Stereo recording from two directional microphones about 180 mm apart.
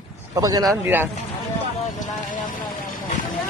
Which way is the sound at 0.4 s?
20° right (ahead or behind).